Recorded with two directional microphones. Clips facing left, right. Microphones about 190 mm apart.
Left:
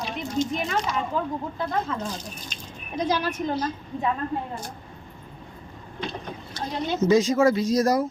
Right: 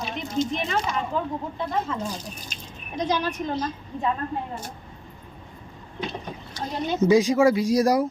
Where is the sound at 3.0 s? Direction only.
5° left (ahead or behind).